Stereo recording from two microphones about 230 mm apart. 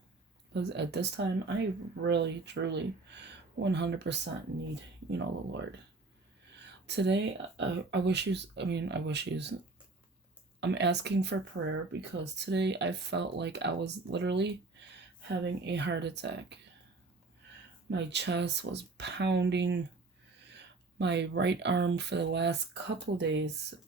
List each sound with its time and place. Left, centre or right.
0.5 s speech: right
10.6 s speech: right
17.8 s speech: right